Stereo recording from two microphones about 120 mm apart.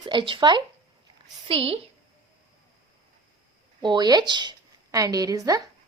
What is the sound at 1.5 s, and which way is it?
Speech, 55° right (ahead or behind).